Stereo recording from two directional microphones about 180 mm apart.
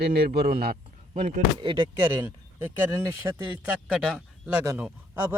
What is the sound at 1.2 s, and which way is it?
Speech, 45° right (ahead or behind).